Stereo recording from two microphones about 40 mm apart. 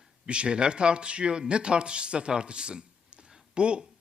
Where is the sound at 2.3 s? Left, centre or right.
Right.